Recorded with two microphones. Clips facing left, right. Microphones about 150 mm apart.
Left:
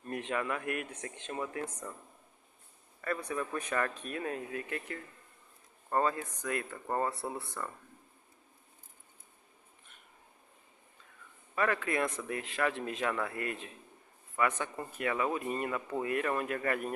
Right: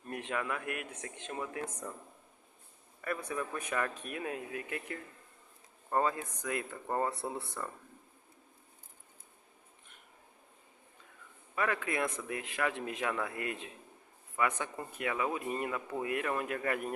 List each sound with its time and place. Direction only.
0.1 s speech: 5° right (ahead or behind)
3.3 s speech: 10° right (ahead or behind)
11.5 s speech: 15° right (ahead or behind)